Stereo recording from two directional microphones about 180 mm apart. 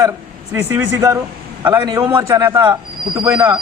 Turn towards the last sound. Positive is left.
turn(degrees=-20)  # may be behind; listen again after turning